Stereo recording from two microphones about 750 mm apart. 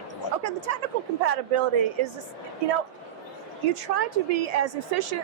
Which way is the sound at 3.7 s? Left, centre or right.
Right.